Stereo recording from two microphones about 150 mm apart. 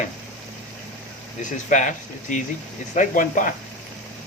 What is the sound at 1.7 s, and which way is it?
Speech, 55° left (ahead or behind).